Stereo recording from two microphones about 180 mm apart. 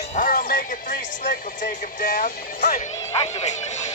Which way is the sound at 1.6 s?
50° left (ahead or behind).